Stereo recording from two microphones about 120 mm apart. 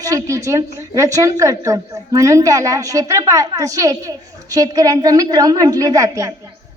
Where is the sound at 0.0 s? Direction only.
30° right (ahead or behind).